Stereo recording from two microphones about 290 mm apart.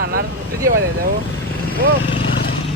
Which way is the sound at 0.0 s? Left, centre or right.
Right.